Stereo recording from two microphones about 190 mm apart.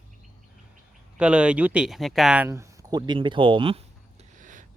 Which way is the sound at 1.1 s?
5° right (ahead or behind).